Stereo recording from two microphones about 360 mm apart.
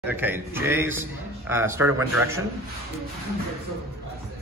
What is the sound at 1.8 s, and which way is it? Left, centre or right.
Speech, right.